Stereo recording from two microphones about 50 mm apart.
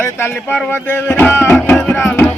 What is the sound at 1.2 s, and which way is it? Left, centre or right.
Music, left.